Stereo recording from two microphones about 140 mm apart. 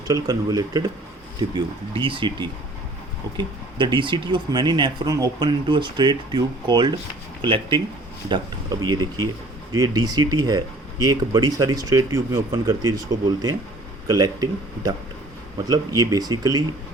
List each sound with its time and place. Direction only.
0.1 s speech: 30° right (ahead or behind)
2.0 s speech: 35° right (ahead or behind)